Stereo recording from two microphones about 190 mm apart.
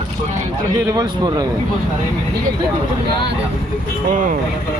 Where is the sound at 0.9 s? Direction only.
20° right (ahead or behind).